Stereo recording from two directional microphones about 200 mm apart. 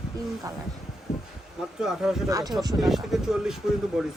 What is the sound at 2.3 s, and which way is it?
Speech, 15° right (ahead or behind).